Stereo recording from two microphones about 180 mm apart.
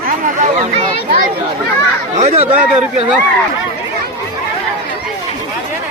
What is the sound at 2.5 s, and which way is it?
Speech, 10° right (ahead or behind).